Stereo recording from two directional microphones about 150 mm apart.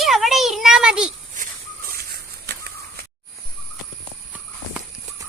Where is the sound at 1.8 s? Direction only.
90° right.